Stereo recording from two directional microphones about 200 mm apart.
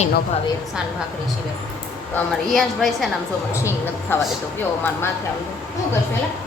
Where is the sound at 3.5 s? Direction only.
15° left (ahead or behind).